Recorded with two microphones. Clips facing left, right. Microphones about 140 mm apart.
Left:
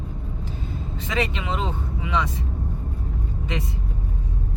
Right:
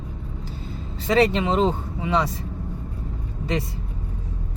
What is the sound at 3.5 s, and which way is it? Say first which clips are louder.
Speech: right 5 dB; 35° right (ahead or behind).